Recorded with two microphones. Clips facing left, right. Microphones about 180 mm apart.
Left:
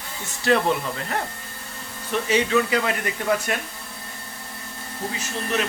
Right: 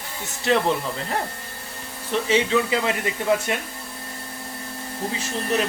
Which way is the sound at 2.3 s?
25° right (ahead or behind).